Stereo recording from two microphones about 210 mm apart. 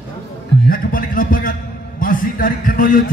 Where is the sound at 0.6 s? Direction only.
40° left (ahead or behind).